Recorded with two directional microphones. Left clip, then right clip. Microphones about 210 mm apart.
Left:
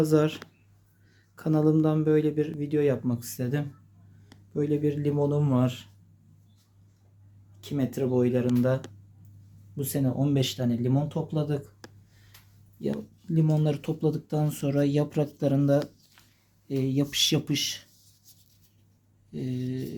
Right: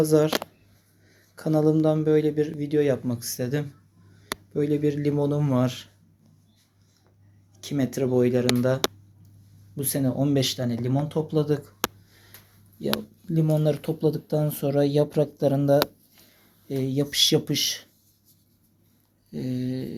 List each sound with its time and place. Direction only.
0.0 s speech: 20° left (ahead or behind)
1.4 s speech: 15° left (ahead or behind)
7.6 s speech: centre (ahead or behind)
13.3 s speech: 15° left (ahead or behind)
19.3 s speech: centre (ahead or behind)